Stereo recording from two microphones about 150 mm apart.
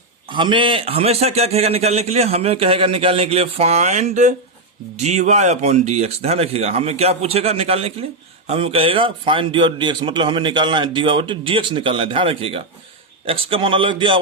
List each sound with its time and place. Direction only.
0.3 s a man's voice: 35° right (ahead or behind)